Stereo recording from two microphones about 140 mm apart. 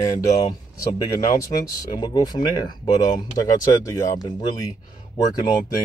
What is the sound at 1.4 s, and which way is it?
Speech, 25° left (ahead or behind).